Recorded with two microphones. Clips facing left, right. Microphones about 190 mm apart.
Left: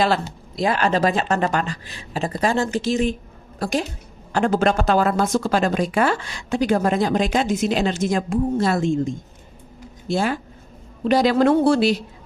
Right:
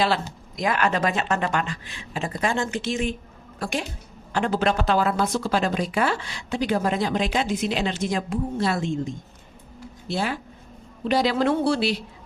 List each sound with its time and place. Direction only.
0.5 s a woman's voice: 30° left (ahead or behind); by 11.9 s 45° left (ahead or behind)